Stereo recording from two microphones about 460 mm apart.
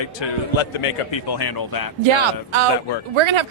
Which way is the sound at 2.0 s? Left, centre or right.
Right.